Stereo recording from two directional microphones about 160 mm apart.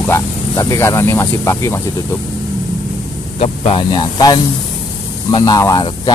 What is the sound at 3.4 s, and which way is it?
Speech, 35° left (ahead or behind).